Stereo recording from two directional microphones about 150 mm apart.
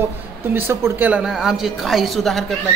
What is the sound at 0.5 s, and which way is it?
A man's voice, 15° right (ahead or behind).